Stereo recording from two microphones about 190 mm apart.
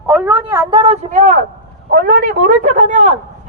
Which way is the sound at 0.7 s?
30° right (ahead or behind).